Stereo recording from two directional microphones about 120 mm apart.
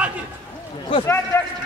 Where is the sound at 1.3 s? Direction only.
25° left (ahead or behind).